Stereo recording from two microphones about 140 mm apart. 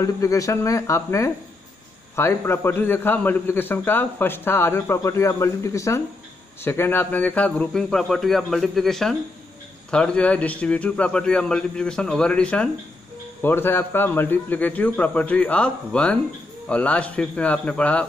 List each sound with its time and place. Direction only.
0.0 s a man's voice: 25° left (ahead or behind)